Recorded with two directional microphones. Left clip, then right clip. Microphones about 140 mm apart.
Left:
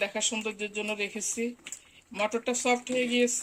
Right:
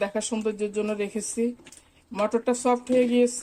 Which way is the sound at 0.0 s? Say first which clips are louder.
Right 3 dB; 15° right (ahead or behind).